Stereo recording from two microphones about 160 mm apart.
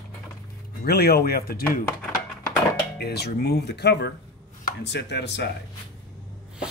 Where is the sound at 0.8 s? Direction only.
75° left (ahead or behind).